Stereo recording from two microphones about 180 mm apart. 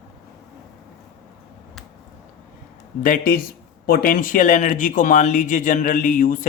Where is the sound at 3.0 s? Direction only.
50° left (ahead or behind).